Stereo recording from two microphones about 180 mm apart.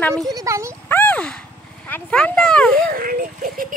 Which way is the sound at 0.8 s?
10° left (ahead or behind).